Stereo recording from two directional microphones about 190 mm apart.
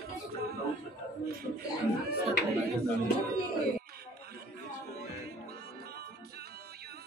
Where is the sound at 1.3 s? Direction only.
55° right (ahead or behind).